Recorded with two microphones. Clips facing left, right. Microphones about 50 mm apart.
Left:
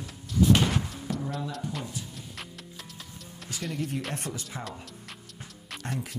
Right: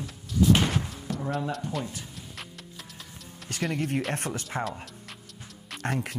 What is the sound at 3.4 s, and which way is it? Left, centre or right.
Music, centre.